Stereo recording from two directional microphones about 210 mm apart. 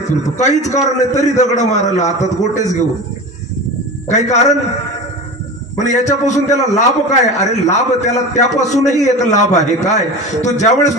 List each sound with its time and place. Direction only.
0.2 s a man's voice: 35° left (ahead or behind)
4.1 s a man's voice: 35° left (ahead or behind)
5.8 s a man's voice: 35° left (ahead or behind)